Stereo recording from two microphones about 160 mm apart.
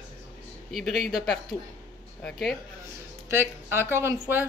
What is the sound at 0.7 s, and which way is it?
Speech, centre (ahead or behind).